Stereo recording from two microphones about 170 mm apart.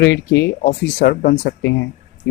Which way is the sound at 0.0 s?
90° left.